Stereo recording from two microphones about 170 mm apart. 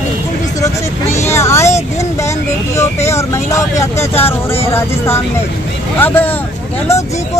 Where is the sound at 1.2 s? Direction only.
15° left (ahead or behind).